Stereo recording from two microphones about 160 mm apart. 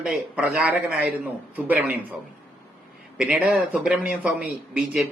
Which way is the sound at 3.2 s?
5° right (ahead or behind).